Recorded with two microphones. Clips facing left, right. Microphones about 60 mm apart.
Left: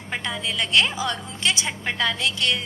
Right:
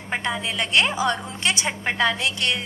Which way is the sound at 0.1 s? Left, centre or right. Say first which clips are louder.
Right 2 dB; right.